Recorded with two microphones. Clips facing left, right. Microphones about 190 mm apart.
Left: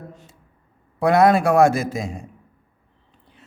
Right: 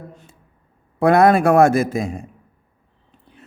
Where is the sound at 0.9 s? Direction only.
55° right (ahead or behind).